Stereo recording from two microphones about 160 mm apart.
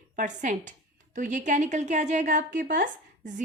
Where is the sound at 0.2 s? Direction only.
55° right (ahead or behind).